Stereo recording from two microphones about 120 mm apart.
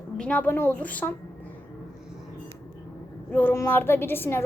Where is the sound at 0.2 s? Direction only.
10° left (ahead or behind).